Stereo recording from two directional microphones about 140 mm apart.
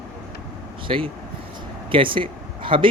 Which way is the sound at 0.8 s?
40° right (ahead or behind).